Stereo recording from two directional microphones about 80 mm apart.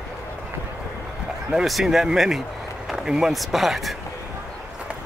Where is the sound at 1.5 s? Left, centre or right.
Centre.